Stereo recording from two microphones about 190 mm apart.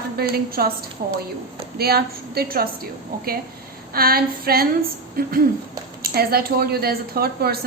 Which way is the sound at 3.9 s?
50° right (ahead or behind).